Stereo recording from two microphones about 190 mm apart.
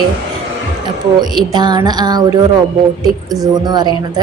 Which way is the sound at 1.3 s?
20° right (ahead or behind).